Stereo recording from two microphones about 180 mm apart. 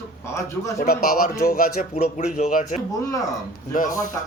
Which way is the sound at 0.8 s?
55° left (ahead or behind).